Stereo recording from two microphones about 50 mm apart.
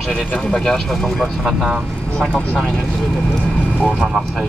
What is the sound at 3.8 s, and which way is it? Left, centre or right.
Speech, centre.